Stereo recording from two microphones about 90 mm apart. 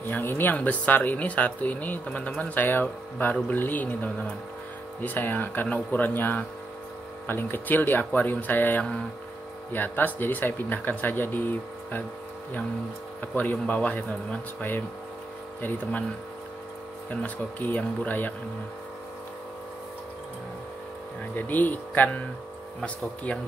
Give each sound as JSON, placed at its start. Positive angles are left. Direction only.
{"t": 0.1, "sound": "speech", "side_deg": 25}
{"t": 13.2, "sound": "speech", "side_deg": 20}
{"t": 17.1, "sound": "speech", "side_deg": 20}
{"t": 21.4, "sound": "speech", "side_deg": 20}